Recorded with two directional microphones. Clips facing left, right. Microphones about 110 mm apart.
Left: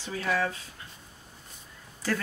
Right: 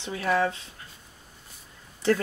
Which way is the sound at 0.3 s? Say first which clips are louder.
Right 4 dB; 25° right (ahead or behind).